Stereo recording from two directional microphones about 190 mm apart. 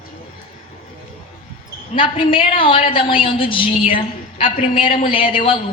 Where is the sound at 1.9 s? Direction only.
30° left (ahead or behind).